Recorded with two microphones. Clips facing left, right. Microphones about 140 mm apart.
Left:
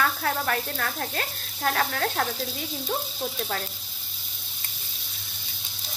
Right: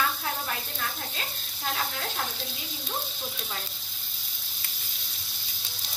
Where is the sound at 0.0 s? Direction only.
60° left (ahead or behind).